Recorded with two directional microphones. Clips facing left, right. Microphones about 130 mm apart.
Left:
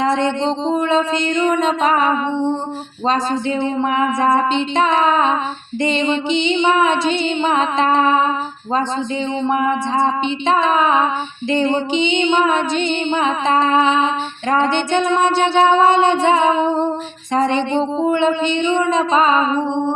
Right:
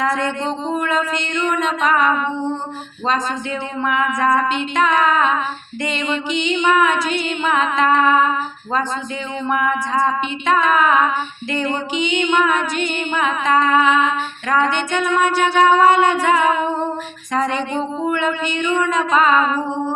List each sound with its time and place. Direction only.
0.0 s music: 25° left (ahead or behind)
3.8 s music: 30° left (ahead or behind)
9.5 s music: 30° left (ahead or behind)